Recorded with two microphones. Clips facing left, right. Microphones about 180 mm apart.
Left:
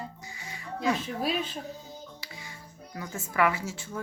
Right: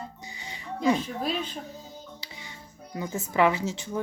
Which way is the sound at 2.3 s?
20° right (ahead or behind).